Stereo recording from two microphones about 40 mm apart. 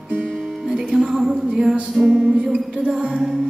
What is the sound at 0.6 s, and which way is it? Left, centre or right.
Music, centre.